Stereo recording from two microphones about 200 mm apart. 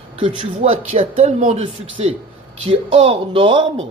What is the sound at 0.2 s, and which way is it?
Speech, 30° right (ahead or behind).